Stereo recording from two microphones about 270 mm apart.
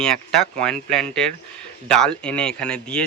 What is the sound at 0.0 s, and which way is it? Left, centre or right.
Speech, centre.